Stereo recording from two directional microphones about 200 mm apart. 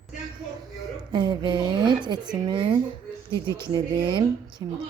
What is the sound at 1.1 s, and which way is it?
A woman's voice, 20° right (ahead or behind).